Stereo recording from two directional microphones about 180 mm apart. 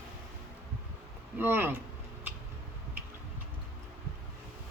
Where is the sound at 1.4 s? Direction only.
10° right (ahead or behind).